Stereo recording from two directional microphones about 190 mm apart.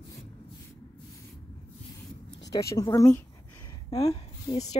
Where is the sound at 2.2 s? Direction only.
20° left (ahead or behind).